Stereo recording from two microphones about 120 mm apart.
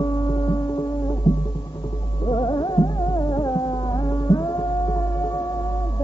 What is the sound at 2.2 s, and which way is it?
Music, 40° left (ahead or behind).